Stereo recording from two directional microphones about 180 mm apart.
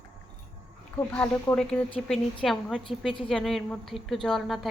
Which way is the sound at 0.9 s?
10° left (ahead or behind).